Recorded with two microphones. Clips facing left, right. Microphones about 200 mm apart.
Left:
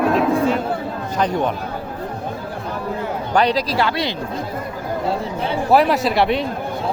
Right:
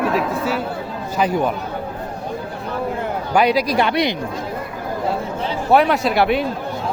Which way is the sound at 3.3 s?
10° right (ahead or behind).